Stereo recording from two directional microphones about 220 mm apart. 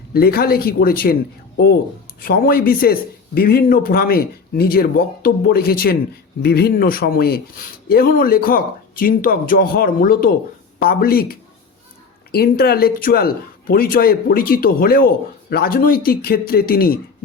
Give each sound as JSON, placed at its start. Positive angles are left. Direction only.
{"t": 0.1, "sound": "speech", "side_deg": 45}
{"t": 2.2, "sound": "speech", "side_deg": 40}